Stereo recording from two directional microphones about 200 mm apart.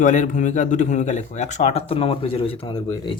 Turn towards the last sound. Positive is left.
turn(degrees=25)  # may be behind; listen again after turning